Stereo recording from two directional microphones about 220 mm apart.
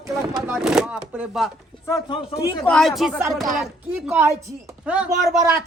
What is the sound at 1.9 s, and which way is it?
Speech, 15° left (ahead or behind).